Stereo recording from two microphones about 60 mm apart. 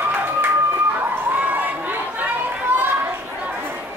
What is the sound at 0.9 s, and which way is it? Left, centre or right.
Chatter, right.